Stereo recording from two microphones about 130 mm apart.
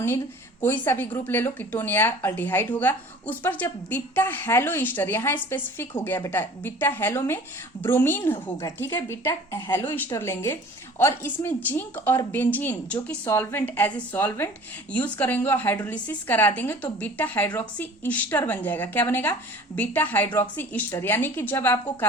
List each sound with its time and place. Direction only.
0.6 s a woman's voice: 15° left (ahead or behind)